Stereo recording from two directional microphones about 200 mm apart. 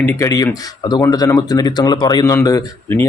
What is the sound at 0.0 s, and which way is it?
Speech, 15° left (ahead or behind).